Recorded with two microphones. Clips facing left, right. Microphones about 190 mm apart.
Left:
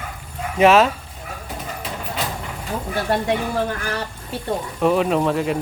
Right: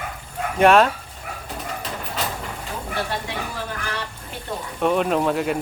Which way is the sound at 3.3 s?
55° left (ahead or behind).